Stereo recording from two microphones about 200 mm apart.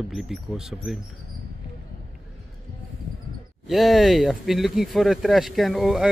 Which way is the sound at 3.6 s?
Centre (ahead or behind).